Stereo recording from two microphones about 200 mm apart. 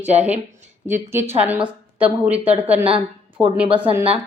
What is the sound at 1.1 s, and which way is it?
A woman's voice, 10° right (ahead or behind).